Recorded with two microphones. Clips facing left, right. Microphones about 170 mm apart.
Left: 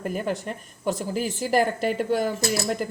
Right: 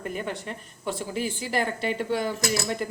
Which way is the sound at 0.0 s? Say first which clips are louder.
Left 4 dB; 40° left (ahead or behind).